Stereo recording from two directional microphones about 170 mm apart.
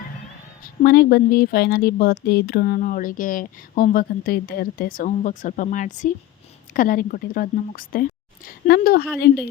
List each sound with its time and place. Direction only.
0.8 s speech: 65° left (ahead or behind)
9.1 s speech: 80° left